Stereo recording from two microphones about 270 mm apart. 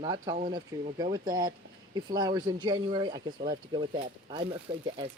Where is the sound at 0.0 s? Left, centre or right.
Centre.